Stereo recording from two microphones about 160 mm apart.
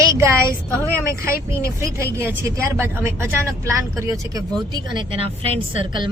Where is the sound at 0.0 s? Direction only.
20° right (ahead or behind).